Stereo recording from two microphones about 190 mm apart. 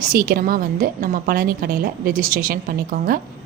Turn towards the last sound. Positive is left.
turn(degrees=-50)  # may be behind; listen again after turning